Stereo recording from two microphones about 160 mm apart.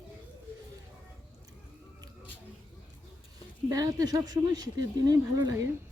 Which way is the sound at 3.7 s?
20° right (ahead or behind).